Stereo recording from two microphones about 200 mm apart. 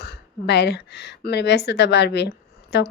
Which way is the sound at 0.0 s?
55° left (ahead or behind).